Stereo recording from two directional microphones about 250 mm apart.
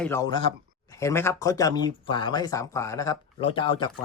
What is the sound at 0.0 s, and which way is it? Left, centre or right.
Speech, centre.